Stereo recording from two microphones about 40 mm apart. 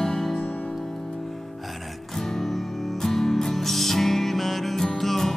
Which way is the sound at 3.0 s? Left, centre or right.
Centre.